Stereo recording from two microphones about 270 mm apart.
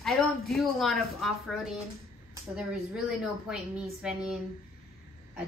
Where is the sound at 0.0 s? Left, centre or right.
Centre.